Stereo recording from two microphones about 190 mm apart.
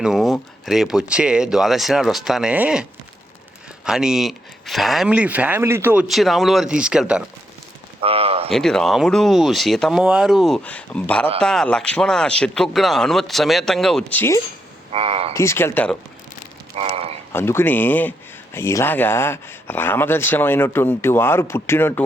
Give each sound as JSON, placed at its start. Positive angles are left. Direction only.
{"t": 0.0, "sound": "speech", "side_deg": 0}
{"t": 3.8, "sound": "speech", "side_deg": -5}
{"t": 8.0, "sound": "a sound", "side_deg": -30}
{"t": 8.4, "sound": "speech", "side_deg": 0}
{"t": 14.9, "sound": "speech", "side_deg": -30}
{"t": 15.3, "sound": "speech", "side_deg": 15}
{"t": 16.7, "sound": "a sound", "side_deg": -30}
{"t": 17.3, "sound": "speech", "side_deg": 10}